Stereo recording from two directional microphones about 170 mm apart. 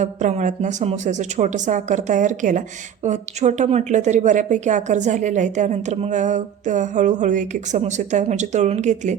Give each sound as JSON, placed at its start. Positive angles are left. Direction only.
{"t": 0.0, "sound": "a woman's voice", "side_deg": -45}